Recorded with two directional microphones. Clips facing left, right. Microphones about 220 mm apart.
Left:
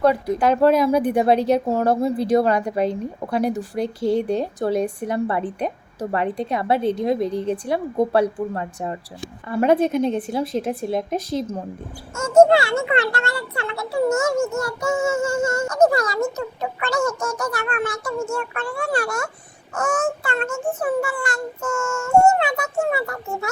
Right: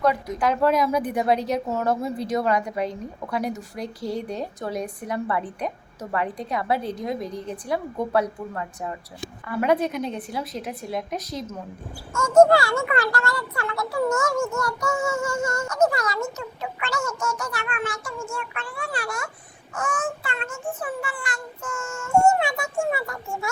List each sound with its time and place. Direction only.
0.0 s a child's voice: 30° left (ahead or behind)